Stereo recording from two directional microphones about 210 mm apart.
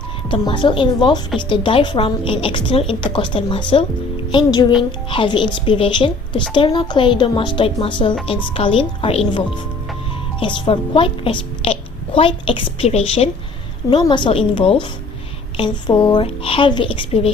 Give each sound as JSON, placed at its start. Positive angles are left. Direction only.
{"t": 0.3, "sound": "a woman's voice", "side_deg": 25}
{"t": 10.4, "sound": "a woman's voice", "side_deg": 25}